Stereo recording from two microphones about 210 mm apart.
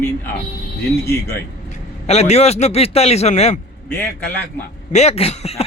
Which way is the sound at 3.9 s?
10° left (ahead or behind).